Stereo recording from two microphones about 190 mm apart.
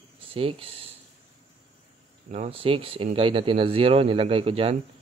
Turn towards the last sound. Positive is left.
turn(degrees=-30)  # may be behind; listen again after turning